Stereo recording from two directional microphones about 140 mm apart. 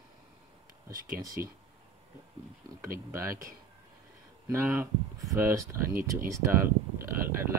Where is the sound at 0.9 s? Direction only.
85° right.